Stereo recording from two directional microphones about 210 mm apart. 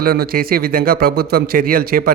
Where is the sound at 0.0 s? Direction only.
45° right (ahead or behind).